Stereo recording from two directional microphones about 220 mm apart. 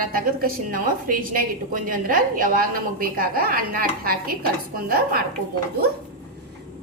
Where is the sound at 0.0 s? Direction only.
40° right (ahead or behind).